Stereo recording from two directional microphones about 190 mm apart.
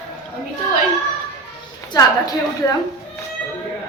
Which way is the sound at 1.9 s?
20° left (ahead or behind).